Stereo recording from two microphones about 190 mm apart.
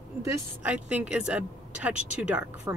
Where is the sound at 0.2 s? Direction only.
10° right (ahead or behind).